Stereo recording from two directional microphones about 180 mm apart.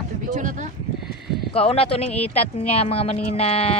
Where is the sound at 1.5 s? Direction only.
30° left (ahead or behind).